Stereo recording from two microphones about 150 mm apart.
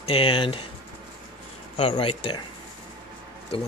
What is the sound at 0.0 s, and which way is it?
Speech, 40° left (ahead or behind).